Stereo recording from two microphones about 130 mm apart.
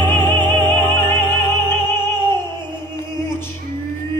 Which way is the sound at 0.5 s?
15° left (ahead or behind).